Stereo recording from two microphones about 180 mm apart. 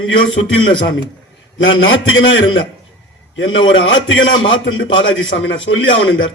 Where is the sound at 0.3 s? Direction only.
90° left.